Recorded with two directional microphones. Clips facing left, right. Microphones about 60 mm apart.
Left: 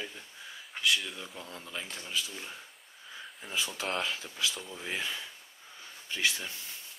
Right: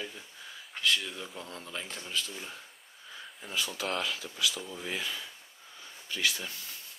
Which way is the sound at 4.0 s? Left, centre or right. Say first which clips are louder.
Right 1 dB; left.